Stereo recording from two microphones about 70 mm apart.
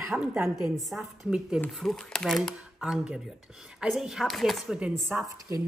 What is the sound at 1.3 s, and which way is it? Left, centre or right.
Speech, centre.